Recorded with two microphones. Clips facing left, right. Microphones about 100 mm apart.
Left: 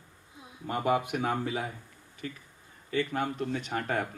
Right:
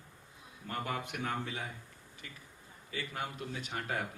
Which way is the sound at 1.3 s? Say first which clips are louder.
Left 7 dB; 45° left (ahead or behind).